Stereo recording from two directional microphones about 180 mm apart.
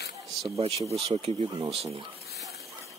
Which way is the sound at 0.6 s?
35° right (ahead or behind).